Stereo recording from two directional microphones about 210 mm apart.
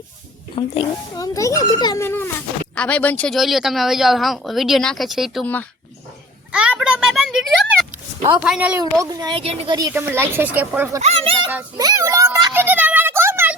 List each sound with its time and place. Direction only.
0.5 s speech: 25° left (ahead or behind)
1.2 s a child's voice: 15° left (ahead or behind)
6.5 s a sound: 5° right (ahead or behind)
8.4 s speech: 5° right (ahead or behind)
8.8 s speech: 15° right (ahead or behind)
9.7 s speech: 15° right (ahead or behind)
11.0 s speech: 25° right (ahead or behind)
11.8 s a sound: 15° right (ahead or behind)